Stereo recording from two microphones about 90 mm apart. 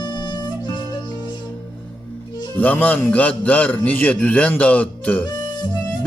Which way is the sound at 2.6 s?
20° left (ahead or behind).